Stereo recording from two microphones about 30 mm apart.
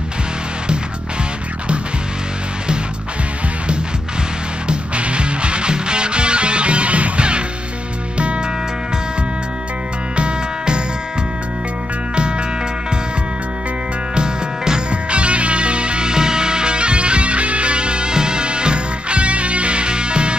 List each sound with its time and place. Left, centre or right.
4.6 s music: right
10.1 s music: right
12.2 s music: right
14.1 s music: right
14.9 s music: right